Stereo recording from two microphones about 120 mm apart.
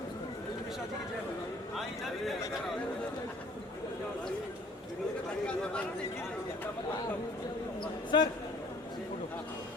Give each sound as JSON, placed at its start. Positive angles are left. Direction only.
{"t": 8.1, "sound": "a man's voice", "side_deg": 35}